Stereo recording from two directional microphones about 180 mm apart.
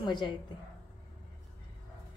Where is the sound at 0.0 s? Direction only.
25° left (ahead or behind).